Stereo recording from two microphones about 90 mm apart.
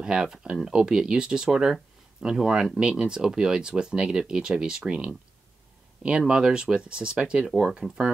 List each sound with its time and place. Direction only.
0.0 s speech: 10° right (ahead or behind)